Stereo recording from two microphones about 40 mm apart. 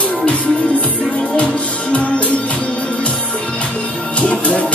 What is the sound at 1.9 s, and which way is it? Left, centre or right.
Music, left.